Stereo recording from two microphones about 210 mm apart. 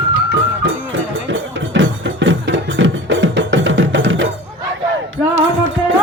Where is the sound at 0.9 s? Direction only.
65° right (ahead or behind).